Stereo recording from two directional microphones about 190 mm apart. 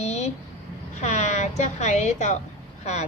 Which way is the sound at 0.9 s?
35° left (ahead or behind).